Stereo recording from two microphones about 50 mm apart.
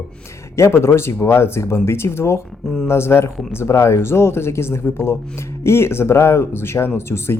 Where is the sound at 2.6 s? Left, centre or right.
Centre.